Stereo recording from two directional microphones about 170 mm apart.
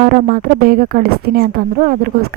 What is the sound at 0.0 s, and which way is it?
Speech, 55° right (ahead or behind).